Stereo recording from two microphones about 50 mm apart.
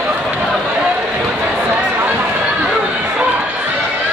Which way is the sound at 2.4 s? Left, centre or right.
Centre.